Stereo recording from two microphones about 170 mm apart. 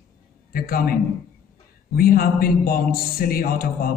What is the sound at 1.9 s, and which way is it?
Speech, 60° left (ahead or behind).